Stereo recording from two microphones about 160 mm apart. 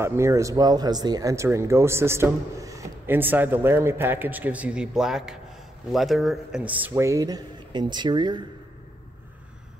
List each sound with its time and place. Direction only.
0.0 s speech: 15° right (ahead or behind)
6.9 s speech: 20° right (ahead or behind)